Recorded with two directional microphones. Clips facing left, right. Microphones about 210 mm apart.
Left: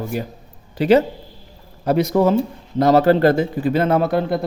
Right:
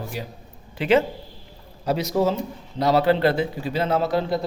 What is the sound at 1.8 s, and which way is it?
Speech, 55° left (ahead or behind).